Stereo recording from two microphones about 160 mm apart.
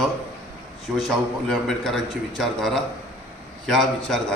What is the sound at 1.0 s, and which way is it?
A man's voice, centre (ahead or behind).